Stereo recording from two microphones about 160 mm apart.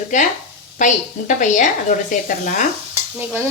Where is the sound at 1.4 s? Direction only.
50° left (ahead or behind).